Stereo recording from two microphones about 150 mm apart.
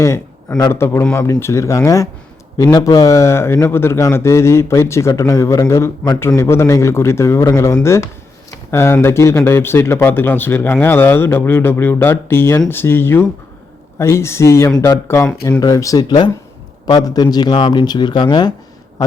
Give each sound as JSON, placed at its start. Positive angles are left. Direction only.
{"t": 0.0, "sound": "a man's voice", "side_deg": 20}